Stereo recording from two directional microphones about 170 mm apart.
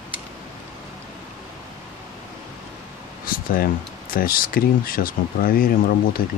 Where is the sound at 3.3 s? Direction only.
55° left (ahead or behind).